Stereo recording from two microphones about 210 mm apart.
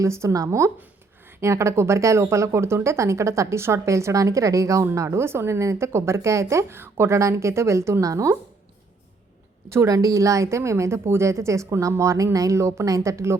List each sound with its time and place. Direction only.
0.0 s speech: 15° right (ahead or behind)
9.6 s speech: 15° right (ahead or behind)